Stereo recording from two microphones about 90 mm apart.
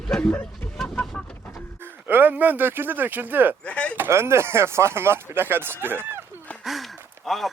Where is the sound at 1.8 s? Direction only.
20° right (ahead or behind).